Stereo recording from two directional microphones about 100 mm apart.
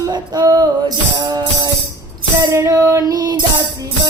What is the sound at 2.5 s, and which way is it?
Female singing, 30° right (ahead or behind).